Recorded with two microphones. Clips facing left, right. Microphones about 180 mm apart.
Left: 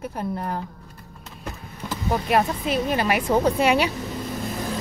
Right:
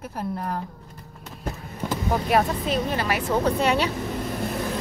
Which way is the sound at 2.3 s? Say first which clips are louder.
Left 1 dB; 5° left (ahead or behind).